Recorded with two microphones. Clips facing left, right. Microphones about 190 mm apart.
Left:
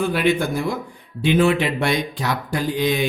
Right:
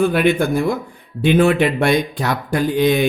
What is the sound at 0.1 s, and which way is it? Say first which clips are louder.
Speech: right 4 dB; 55° right (ahead or behind).